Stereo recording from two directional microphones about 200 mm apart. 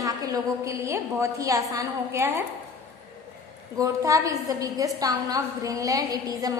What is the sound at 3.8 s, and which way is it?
A woman's voice, 15° right (ahead or behind).